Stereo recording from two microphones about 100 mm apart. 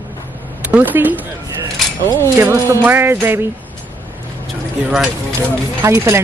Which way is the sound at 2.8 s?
20° right (ahead or behind).